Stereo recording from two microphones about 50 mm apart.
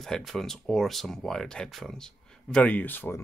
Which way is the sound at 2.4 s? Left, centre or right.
Centre.